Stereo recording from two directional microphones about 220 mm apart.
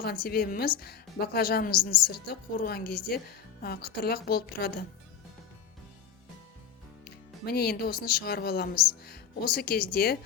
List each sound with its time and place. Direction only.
0.0 s a woman's voice: 45° left (ahead or behind)
7.0 s a woman's voice: 45° left (ahead or behind)